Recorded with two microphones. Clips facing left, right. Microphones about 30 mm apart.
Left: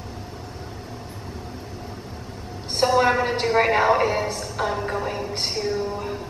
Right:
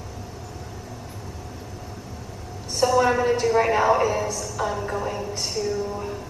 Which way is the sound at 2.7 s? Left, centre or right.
Left.